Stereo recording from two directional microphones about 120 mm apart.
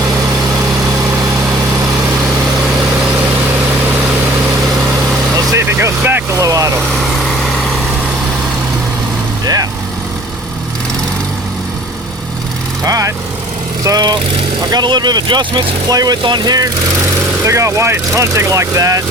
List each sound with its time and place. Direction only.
5.5 s vehicle: 20° right (ahead or behind)
9.4 s vehicle: 30° right (ahead or behind)
12.8 s vehicle: 30° right (ahead or behind)
14.7 s speech: 35° right (ahead or behind)
17.4 s speech: 25° right (ahead or behind)